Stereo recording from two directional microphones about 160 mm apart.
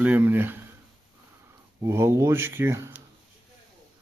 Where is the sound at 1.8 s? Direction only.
15° right (ahead or behind).